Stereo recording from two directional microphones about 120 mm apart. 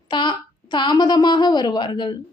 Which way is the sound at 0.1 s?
40° left (ahead or behind).